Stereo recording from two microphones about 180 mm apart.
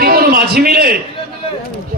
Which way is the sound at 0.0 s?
55° right (ahead or behind).